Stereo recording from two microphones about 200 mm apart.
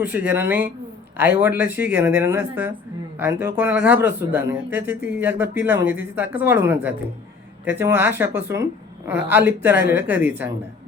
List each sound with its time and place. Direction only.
0.0 s speech: 10° right (ahead or behind)